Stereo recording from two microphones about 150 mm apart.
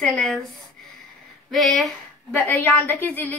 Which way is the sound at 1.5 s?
Centre (ahead or behind).